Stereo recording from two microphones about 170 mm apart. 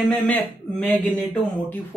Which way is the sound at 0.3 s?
5° left (ahead or behind).